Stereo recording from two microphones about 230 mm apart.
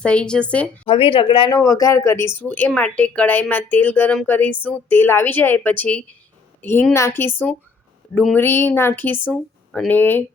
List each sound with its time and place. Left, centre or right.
0.0 s a woman's voice: centre
0.9 s speech: left; by 10.2 s centre